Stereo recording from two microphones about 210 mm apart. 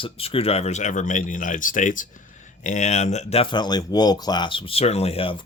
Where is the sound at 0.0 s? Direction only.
25° left (ahead or behind).